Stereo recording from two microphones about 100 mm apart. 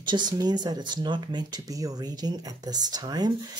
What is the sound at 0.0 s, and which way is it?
Speech, 50° right (ahead or behind).